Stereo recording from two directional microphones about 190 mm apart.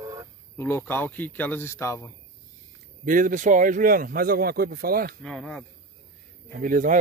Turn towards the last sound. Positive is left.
turn(degrees=-45)  # may be behind; listen again after turning